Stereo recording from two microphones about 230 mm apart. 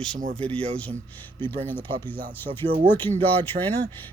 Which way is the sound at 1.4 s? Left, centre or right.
Centre.